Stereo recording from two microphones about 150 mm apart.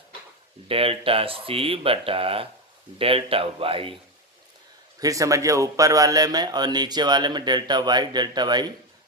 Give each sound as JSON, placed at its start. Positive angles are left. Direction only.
{"t": 0.7, "sound": "speech", "side_deg": -40}
{"t": 4.9, "sound": "a man's voice", "side_deg": -25}